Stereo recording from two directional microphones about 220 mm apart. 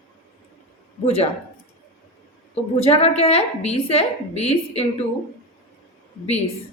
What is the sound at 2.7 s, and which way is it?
A woman's voice, 25° left (ahead or behind).